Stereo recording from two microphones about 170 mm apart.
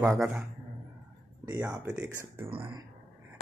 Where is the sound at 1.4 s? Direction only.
15° right (ahead or behind).